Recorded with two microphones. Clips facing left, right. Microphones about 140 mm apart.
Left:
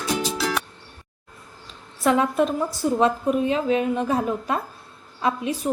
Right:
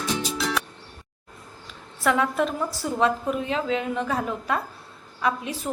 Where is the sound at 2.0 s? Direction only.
20° left (ahead or behind).